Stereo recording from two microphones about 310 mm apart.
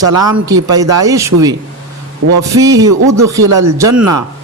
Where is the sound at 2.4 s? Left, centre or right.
Centre.